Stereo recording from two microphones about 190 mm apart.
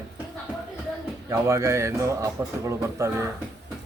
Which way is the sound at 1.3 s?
15° right (ahead or behind).